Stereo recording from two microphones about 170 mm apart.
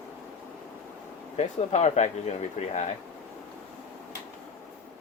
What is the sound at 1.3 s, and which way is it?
A man's voice, 40° left (ahead or behind).